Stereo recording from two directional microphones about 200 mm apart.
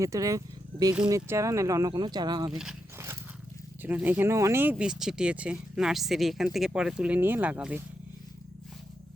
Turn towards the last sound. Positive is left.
turn(degrees=-5)  # may be behind; listen again after turning